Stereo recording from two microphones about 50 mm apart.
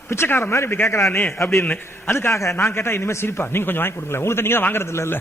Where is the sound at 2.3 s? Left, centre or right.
Left.